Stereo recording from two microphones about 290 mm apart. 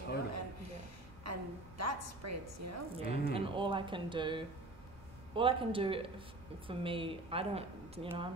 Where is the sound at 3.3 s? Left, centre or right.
Centre.